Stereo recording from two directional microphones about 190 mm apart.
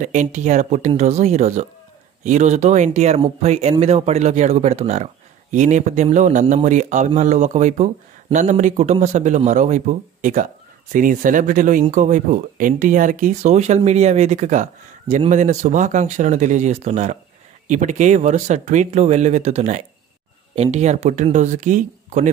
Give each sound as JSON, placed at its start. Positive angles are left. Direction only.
{"t": 0.0, "sound": "speech", "side_deg": -40}